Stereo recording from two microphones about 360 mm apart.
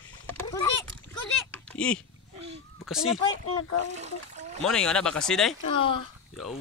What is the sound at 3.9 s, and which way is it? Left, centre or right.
Splash, centre.